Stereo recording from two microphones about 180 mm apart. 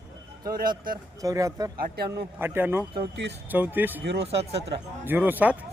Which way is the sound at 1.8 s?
60° right (ahead or behind).